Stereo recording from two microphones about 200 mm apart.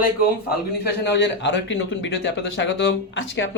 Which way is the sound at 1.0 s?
60° left (ahead or behind).